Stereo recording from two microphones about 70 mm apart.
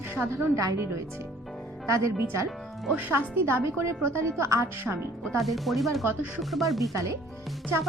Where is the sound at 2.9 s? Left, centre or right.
Right.